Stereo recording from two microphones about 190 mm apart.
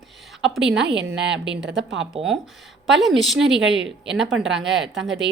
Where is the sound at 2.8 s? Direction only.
Centre (ahead or behind).